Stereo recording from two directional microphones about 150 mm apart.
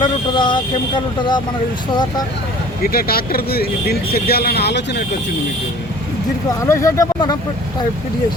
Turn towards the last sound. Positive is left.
turn(degrees=25)  # may be behind; listen again after turning